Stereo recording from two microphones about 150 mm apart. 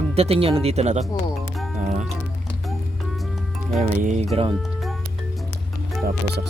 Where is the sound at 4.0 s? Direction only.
55° right (ahead or behind).